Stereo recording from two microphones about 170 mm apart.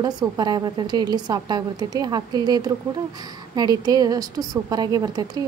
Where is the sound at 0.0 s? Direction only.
25° right (ahead or behind).